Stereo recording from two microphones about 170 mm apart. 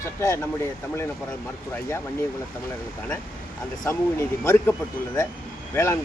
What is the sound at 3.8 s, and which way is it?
Speech, 15° left (ahead or behind).